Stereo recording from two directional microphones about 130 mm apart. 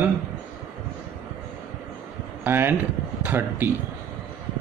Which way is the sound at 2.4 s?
15° right (ahead or behind).